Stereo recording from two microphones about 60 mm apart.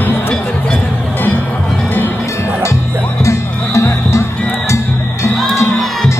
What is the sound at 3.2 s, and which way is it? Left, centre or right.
Music, left.